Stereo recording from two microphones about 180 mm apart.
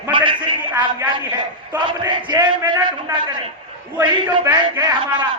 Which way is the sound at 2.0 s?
20° right (ahead or behind).